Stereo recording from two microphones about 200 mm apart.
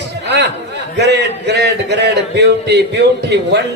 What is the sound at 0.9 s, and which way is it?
A man's voice, 55° right (ahead or behind).